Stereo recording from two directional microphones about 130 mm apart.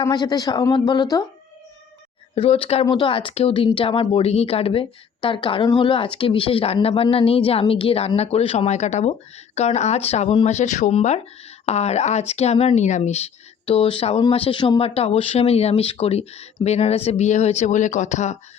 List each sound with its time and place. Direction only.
0.0 s speech: 30° left (ahead or behind)
2.3 s speech: 50° left (ahead or behind)